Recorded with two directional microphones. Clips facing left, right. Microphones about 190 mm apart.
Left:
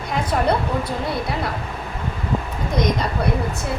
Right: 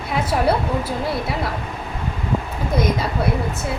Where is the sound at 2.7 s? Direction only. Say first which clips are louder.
Even; 5° right (ahead or behind).